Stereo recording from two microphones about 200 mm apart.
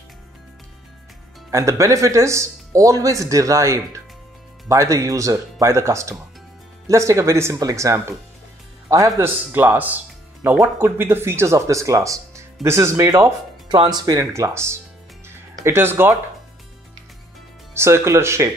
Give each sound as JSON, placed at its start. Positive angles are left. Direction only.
{"t": 1.5, "sound": "speech", "side_deg": -15}
{"t": 17.7, "sound": "speech", "side_deg": -15}